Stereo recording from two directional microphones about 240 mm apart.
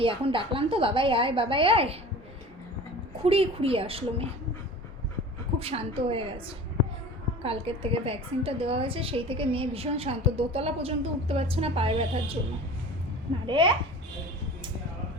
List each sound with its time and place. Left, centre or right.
0.0 s a woman's voice: right
3.2 s a woman's voice: right
5.5 s a woman's voice: right
7.4 s a woman's voice: right
13.5 s a woman's voice: centre